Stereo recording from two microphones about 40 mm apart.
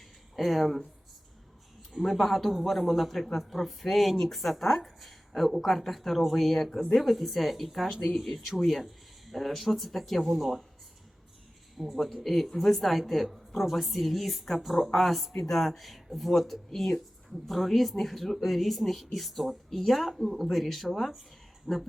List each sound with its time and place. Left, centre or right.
0.3 s speech: centre
2.0 s speech: centre
11.8 s speech: centre
15.3 s speech: centre
15.5 s speech: centre
20.2 s speech: centre
20.5 s speech: centre
21.7 s speech: centre